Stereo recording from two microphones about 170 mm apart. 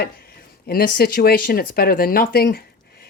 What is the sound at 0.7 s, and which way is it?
Speech, 60° left (ahead or behind).